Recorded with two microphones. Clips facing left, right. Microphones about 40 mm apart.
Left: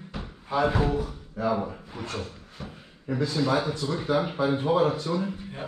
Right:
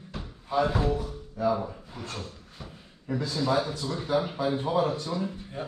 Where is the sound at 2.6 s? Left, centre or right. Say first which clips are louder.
Left 4 dB; centre.